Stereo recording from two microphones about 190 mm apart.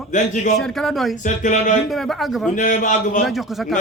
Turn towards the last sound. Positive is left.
turn(degrees=40)  # may be behind; listen again after turning